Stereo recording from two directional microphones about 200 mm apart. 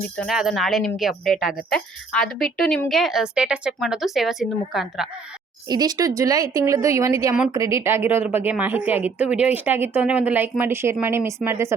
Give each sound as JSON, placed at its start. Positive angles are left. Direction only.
{"t": 0.2, "sound": "speech", "side_deg": 0}
{"t": 5.6, "sound": "speech", "side_deg": -20}